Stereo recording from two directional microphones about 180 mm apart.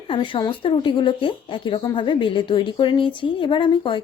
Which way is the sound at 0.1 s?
25° left (ahead or behind).